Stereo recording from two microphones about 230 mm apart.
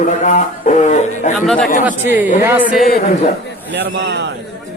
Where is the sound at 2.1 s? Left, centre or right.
Centre.